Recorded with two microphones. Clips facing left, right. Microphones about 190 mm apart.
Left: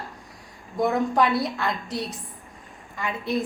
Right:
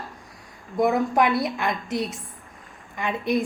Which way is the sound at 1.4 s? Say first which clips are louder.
Right 1 dB; 20° right (ahead or behind).